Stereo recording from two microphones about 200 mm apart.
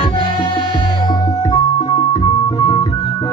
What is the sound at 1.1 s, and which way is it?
Music, 20° left (ahead or behind).